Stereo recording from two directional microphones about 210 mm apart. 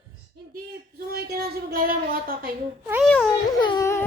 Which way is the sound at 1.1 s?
50° right (ahead or behind).